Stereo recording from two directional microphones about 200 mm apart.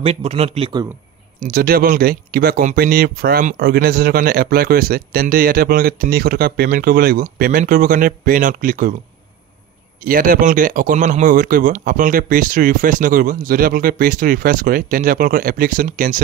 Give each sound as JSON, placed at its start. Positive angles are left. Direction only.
{"t": 0.0, "sound": "speech", "side_deg": -30}
{"t": 1.5, "sound": "speech", "side_deg": -45}
{"t": 10.0, "sound": "speech", "side_deg": -45}